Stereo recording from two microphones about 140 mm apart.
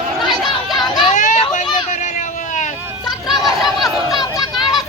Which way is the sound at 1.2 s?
65° left (ahead or behind).